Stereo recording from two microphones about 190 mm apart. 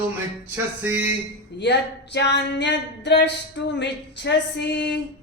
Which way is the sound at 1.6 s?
65° left (ahead or behind).